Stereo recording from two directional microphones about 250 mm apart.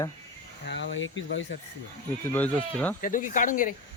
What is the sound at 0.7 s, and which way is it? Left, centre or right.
Speech, left.